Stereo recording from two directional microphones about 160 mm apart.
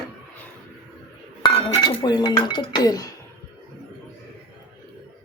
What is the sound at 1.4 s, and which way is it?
Speech, 25° left (ahead or behind).